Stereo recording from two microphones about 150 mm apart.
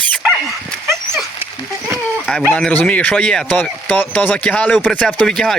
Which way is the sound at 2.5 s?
5° left (ahead or behind).